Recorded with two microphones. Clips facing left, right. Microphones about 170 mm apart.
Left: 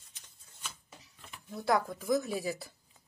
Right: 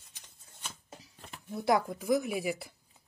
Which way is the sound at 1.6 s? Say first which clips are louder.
Right 2 dB; 15° right (ahead or behind).